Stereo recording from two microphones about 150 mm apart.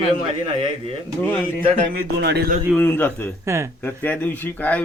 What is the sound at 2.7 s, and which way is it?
A man's voice, 10° left (ahead or behind).